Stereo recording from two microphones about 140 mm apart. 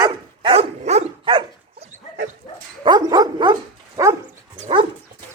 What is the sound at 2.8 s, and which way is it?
Dog, 30° right (ahead or behind).